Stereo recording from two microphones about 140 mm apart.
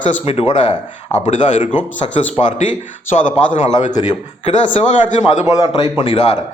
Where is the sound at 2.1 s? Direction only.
60° left (ahead or behind).